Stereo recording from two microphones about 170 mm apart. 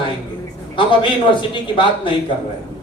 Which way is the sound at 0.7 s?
30° left (ahead or behind).